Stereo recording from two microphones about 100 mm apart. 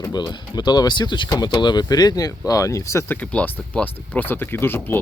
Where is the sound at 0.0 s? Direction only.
45° left (ahead or behind); by 3.2 s 30° left (ahead or behind).